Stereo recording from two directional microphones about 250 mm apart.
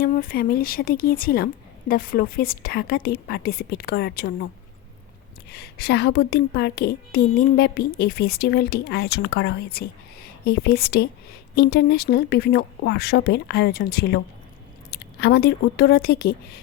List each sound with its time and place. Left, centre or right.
0.0 s a woman's voice: left
5.5 s a woman's voice: left